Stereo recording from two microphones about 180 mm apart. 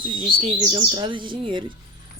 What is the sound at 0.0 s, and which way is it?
A woman's voice, 30° right (ahead or behind).